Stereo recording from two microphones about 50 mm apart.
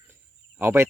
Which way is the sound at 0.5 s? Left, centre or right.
Right.